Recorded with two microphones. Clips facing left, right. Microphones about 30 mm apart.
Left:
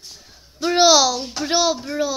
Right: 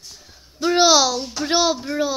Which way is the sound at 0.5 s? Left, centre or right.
Centre.